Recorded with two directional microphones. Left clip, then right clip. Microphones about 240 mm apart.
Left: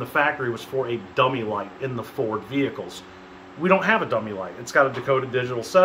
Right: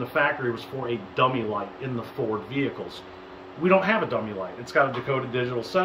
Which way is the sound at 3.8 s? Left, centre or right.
Centre.